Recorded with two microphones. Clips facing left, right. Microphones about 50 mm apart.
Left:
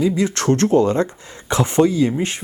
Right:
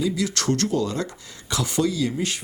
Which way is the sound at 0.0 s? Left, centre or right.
Left.